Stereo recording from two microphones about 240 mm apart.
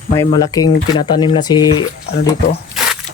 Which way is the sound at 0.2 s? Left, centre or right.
Centre.